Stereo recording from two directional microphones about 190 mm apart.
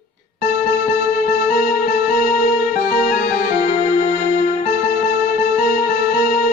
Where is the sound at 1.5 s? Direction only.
45° left (ahead or behind).